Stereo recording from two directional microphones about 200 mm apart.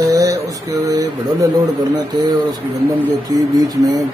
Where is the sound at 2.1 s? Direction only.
20° right (ahead or behind).